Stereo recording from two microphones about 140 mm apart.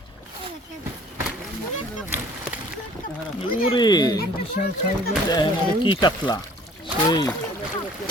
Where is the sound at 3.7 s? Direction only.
30° left (ahead or behind).